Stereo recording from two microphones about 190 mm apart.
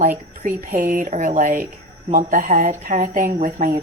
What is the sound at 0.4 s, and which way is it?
Speech, 45° right (ahead or behind).